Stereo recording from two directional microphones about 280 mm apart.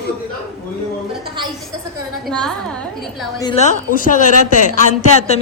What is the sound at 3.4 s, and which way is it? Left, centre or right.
A man's voice, left.